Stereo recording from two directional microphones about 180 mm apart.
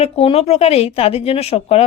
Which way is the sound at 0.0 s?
35° left (ahead or behind).